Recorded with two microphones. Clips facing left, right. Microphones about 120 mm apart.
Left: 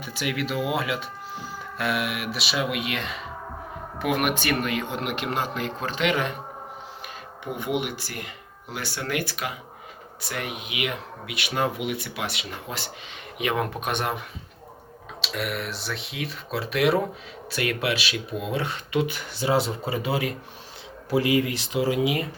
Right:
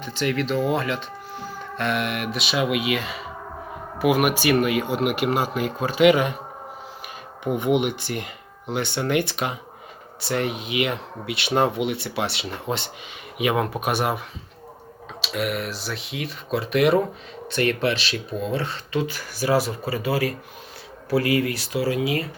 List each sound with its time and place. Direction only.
0.0 s speech: 10° left (ahead or behind); by 6.3 s 10° right (ahead or behind)
7.6 s speech: 20° right (ahead or behind)
13.4 s speech: 5° right (ahead or behind)
15.2 s speech: centre (ahead or behind); by 22.3 s 15° left (ahead or behind)